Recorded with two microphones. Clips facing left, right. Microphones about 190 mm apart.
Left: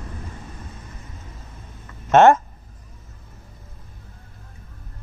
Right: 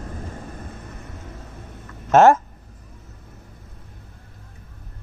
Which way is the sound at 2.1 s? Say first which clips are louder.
Even; centre (ahead or behind).